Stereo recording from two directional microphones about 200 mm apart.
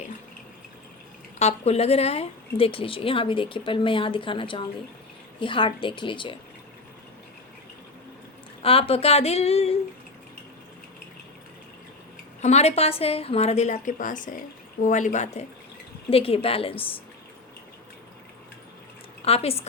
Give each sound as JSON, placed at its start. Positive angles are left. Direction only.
{"t": 1.4, "sound": "speech", "side_deg": 30}
{"t": 8.6, "sound": "a woman's voice", "side_deg": 30}
{"t": 12.4, "sound": "a woman's voice", "side_deg": 35}
{"t": 19.2, "sound": "speech", "side_deg": 30}